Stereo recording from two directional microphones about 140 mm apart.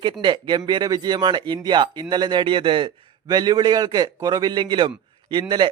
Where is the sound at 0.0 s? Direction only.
35° right (ahead or behind).